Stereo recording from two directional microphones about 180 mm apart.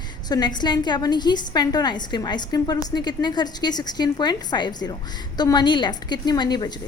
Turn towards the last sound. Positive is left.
turn(degrees=25)  # may be behind; listen again after turning